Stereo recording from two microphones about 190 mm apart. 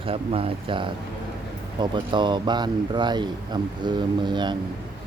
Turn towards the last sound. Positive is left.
turn(degrees=-25)  # may be behind; listen again after turning